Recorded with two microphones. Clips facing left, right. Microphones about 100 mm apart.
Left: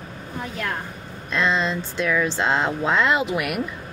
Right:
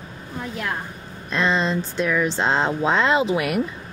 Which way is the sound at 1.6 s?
30° right (ahead or behind).